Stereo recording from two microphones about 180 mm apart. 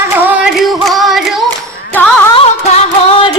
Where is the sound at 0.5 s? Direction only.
Centre (ahead or behind).